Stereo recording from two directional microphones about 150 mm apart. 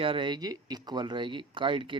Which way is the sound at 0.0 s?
35° right (ahead or behind).